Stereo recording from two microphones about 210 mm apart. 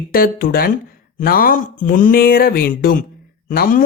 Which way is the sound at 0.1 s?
45° left (ahead or behind).